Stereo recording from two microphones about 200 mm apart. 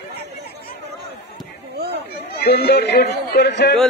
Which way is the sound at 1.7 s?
55° right (ahead or behind).